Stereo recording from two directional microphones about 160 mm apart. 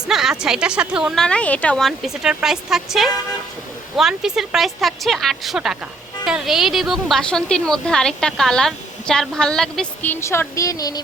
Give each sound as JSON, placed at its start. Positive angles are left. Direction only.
{"t": 0.1, "sound": "a woman's voice", "side_deg": -5}